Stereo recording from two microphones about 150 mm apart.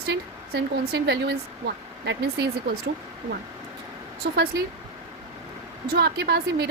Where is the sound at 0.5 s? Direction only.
90° right.